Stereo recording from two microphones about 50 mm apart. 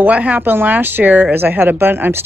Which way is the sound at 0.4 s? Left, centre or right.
Right.